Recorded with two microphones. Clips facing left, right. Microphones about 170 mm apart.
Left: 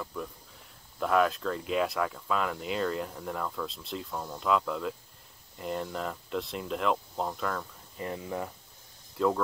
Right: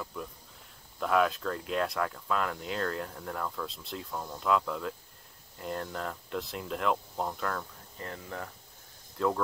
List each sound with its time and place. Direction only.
0.0 s cricket: centre (ahead or behind)
0.9 s speech: centre (ahead or behind)
8.0 s speech: 15° left (ahead or behind)
9.2 s speech: centre (ahead or behind)